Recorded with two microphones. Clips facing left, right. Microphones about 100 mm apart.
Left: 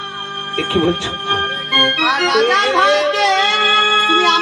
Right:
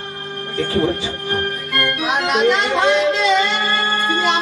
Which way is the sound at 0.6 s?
75° left (ahead or behind).